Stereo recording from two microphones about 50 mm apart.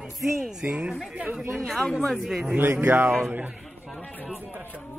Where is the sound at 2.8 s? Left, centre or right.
Right.